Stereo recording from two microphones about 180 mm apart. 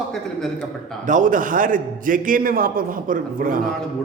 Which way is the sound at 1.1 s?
45° right (ahead or behind).